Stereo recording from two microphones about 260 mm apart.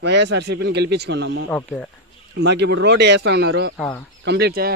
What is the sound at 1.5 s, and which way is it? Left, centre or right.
Speech, centre.